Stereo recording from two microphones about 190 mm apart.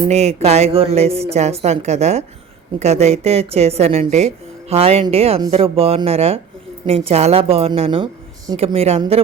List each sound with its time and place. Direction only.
0.1 s a woman's voice: 35° right (ahead or behind)